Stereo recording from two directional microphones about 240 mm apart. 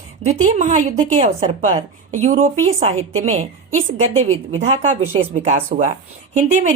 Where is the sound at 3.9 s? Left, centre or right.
Right.